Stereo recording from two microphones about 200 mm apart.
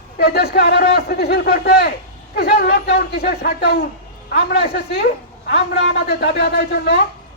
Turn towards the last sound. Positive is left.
turn(degrees=55)  # may be behind; listen again after turning